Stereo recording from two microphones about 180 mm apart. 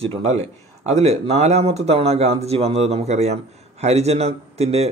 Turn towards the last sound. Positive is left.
turn(degrees=-35)  # may be behind; listen again after turning